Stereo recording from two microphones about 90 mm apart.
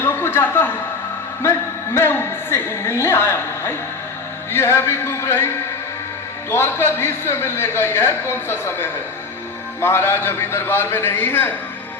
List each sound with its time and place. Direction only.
0.0 s a sound: 25° left (ahead or behind)
1.4 s a woman's voice: 30° left (ahead or behind)
6.5 s a man's voice: 25° left (ahead or behind)